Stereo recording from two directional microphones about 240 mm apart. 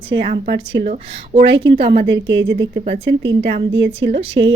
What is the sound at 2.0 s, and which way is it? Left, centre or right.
A woman's voice, right.